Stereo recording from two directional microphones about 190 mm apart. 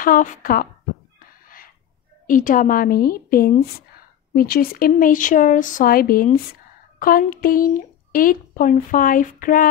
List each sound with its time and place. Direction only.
0.0 s speech: 45° left (ahead or behind)
2.2 s speech: 45° left (ahead or behind)